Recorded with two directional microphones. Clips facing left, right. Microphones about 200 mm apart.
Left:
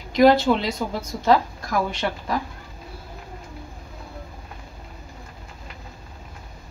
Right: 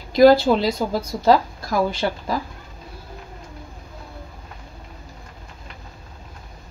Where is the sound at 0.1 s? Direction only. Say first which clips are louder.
Right 3 dB; 35° right (ahead or behind).